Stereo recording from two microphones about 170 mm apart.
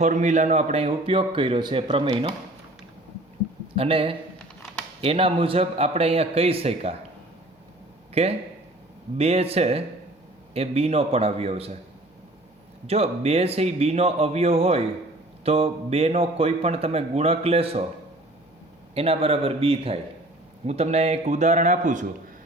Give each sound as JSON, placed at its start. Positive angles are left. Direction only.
{"t": 0.0, "sound": "speech", "side_deg": -45}
{"t": 3.8, "sound": "speech", "side_deg": -35}
{"t": 8.1, "sound": "speech", "side_deg": -35}
{"t": 12.9, "sound": "speech", "side_deg": -35}
{"t": 18.9, "sound": "a man's voice", "side_deg": -35}